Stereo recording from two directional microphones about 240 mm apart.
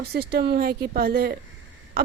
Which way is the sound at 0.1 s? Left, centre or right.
Right.